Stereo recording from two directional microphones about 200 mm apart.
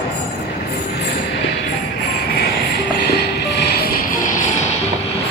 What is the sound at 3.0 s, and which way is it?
Music, 55° left (ahead or behind).